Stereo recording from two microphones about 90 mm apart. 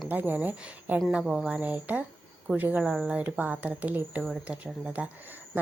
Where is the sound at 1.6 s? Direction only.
15° right (ahead or behind).